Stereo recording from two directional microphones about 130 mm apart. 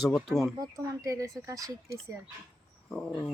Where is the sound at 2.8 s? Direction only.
5° left (ahead or behind).